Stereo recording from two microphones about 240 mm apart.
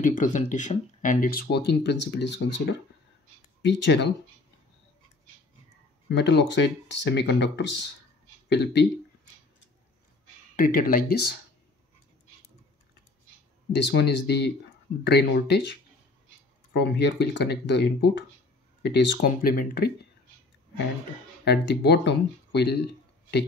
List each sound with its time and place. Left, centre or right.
0.0 s speech: left
6.0 s speech: left
10.5 s speech: left
13.7 s speech: left
16.7 s speech: left
21.5 s speech: left